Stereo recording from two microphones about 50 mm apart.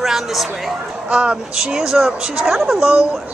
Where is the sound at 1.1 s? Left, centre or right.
Centre.